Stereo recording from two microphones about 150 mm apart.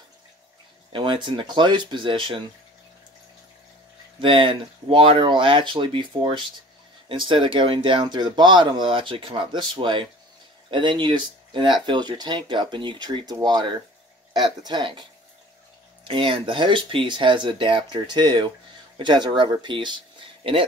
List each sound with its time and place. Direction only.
0.9 s speech: 35° right (ahead or behind)
4.2 s speech: 35° right (ahead or behind)